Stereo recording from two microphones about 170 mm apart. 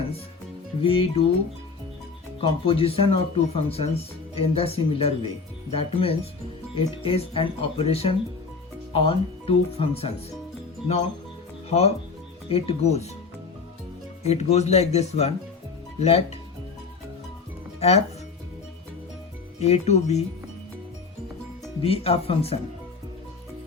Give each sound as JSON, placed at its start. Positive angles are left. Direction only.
{"t": 0.8, "sound": "speech", "side_deg": 30}
{"t": 2.4, "sound": "speech", "side_deg": 35}
{"t": 11.7, "sound": "speech", "side_deg": 40}
{"t": 14.3, "sound": "speech", "side_deg": 40}
{"t": 17.7, "sound": "speech", "side_deg": 40}
{"t": 19.5, "sound": "speech", "side_deg": 40}
{"t": 21.8, "sound": "speech", "side_deg": 35}